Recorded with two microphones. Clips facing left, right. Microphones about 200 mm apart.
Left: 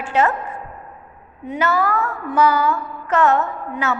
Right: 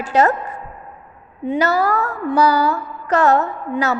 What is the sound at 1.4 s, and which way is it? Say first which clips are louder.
A woman's voice: right 3 dB; 35° right (ahead or behind).